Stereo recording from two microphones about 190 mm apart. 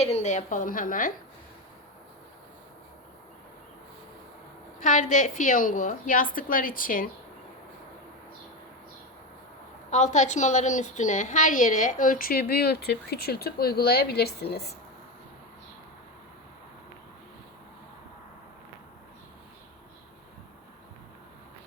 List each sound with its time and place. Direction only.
0.0 s a woman's voice: 35° left (ahead or behind)
4.8 s a woman's voice: 40° left (ahead or behind)
9.9 s a woman's voice: 40° left (ahead or behind); by 14.8 s 55° left (ahead or behind)